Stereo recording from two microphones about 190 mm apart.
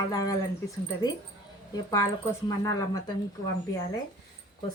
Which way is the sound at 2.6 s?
15° left (ahead or behind).